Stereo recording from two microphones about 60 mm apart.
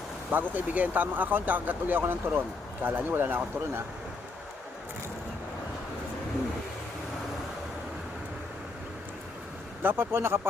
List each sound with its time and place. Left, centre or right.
0.3 s speech: right
9.8 s speech: right